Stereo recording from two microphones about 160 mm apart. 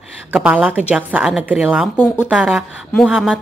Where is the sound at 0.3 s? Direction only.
10° right (ahead or behind).